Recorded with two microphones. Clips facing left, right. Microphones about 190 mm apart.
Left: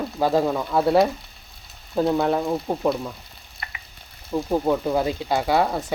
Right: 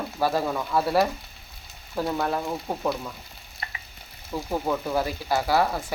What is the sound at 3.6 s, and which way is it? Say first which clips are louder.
Frying: even; 35° right (ahead or behind).